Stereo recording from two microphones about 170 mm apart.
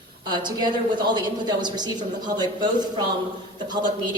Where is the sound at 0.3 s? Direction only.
25° right (ahead or behind).